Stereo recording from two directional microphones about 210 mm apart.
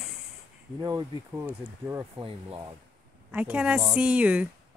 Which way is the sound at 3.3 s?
5° right (ahead or behind).